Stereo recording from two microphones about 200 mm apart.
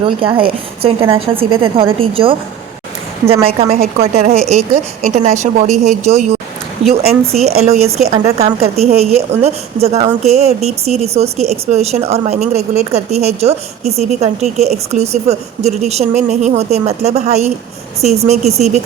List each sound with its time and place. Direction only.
0.0 s a woman's voice: 25° right (ahead or behind)
3.4 s a woman's voice: 30° right (ahead or behind)